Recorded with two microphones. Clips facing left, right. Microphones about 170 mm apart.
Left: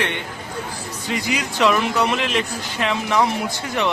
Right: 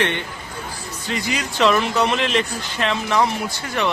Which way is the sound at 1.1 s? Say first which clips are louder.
Left 1 dB; 10° left (ahead or behind).